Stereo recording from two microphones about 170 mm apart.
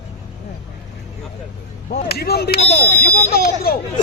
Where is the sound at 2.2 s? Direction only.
70° left (ahead or behind).